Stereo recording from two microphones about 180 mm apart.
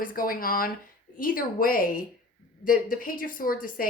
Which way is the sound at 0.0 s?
50° left (ahead or behind).